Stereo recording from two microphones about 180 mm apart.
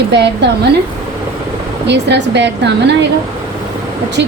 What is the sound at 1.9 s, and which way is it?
A woman's voice, 70° right (ahead or behind).